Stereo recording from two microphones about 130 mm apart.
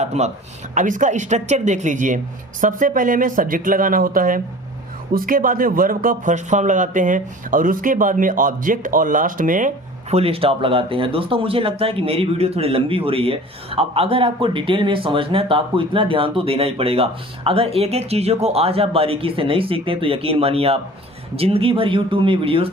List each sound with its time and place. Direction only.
0.0 s speech: 60° right (ahead or behind)
0.7 s a man's voice: 75° right (ahead or behind)
10.1 s speech: 50° right (ahead or behind)